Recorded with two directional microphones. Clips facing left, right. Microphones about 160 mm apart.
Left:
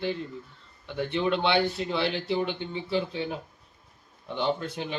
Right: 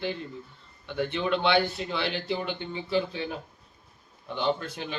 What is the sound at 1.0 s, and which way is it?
Speech, 30° left (ahead or behind).